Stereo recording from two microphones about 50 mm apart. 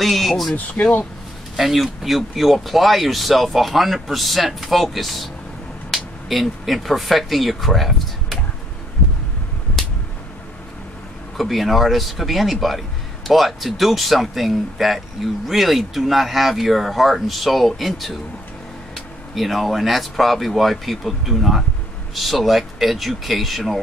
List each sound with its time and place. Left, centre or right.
0.0 s speech: centre
0.8 s speech: left
1.6 s speech: centre
11.3 s speech: centre